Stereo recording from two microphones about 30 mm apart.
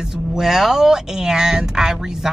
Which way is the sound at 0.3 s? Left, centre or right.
Centre.